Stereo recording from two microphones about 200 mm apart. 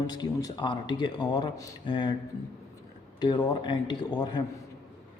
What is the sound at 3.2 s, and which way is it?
A man's voice, 20° left (ahead or behind).